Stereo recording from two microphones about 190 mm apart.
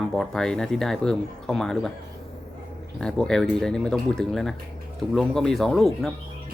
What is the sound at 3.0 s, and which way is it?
Speech, 5° left (ahead or behind).